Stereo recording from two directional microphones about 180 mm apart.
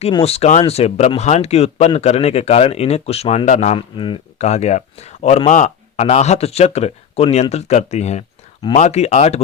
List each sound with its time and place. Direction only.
0.0 s speech: 30° left (ahead or behind)